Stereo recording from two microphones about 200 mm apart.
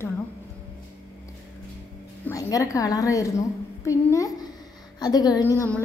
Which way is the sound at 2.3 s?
15° left (ahead or behind).